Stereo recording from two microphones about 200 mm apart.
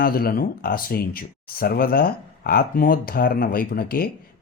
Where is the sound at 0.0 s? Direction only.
50° left (ahead or behind).